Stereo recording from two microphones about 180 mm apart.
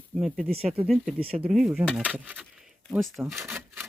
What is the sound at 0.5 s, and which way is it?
Speech, 35° right (ahead or behind).